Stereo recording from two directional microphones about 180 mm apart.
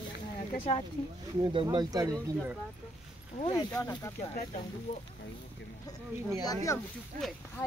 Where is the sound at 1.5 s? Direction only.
25° right (ahead or behind).